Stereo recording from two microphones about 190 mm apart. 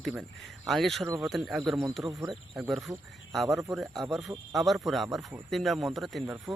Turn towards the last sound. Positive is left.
turn(degrees=0)  # may be behind; listen again after turning